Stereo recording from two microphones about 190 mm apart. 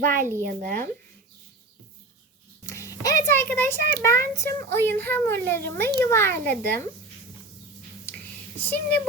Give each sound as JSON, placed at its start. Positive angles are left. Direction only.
{"t": 0.0, "sound": "speech", "side_deg": -45}
{"t": 2.6, "sound": "a child's voice", "side_deg": 15}
{"t": 8.6, "sound": "a child's voice", "side_deg": 10}